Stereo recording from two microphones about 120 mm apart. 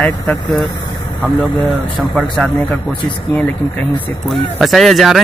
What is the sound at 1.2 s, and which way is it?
Speech, centre (ahead or behind).